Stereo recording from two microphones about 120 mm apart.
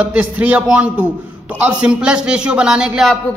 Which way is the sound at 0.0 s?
10° right (ahead or behind).